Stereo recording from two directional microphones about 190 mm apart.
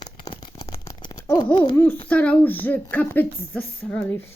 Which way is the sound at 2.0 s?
5° left (ahead or behind).